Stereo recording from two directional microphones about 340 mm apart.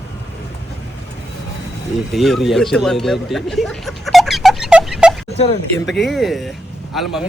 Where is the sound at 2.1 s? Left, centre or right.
Centre.